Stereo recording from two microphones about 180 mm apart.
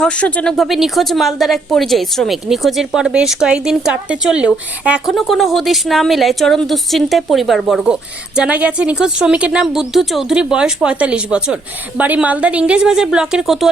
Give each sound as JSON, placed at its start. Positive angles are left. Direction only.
{"t": 0.0, "sound": "a woman's voice", "side_deg": 5}